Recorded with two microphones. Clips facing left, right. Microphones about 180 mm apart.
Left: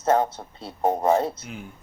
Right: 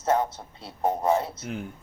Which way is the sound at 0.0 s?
60° left (ahead or behind).